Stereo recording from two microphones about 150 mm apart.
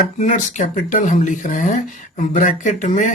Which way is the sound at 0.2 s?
55° left (ahead or behind).